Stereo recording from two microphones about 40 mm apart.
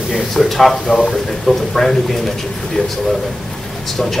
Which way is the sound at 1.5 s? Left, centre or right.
Left.